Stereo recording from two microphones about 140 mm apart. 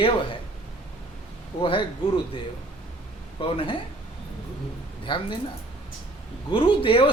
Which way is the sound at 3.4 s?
40° left (ahead or behind).